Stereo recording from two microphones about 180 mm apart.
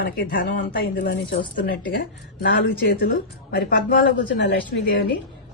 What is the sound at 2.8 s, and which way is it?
A woman's voice, 80° left.